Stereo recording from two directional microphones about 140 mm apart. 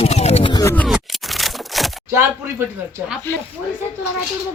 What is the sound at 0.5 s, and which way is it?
Oink, 20° left (ahead or behind).